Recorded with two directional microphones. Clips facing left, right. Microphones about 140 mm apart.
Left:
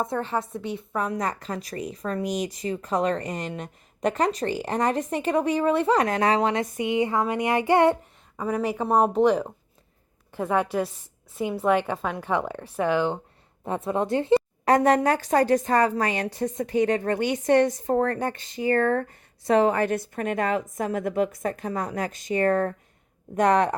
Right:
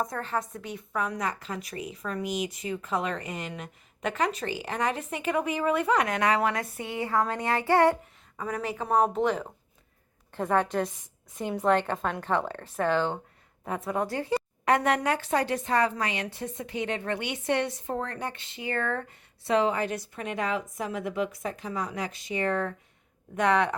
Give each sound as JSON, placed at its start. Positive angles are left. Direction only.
{"t": 0.0, "sound": "a woman's voice", "side_deg": 30}
{"t": 8.8, "sound": "a woman's voice", "side_deg": 35}
{"t": 10.3, "sound": "speech", "side_deg": 10}
{"t": 13.7, "sound": "a woman's voice", "side_deg": 25}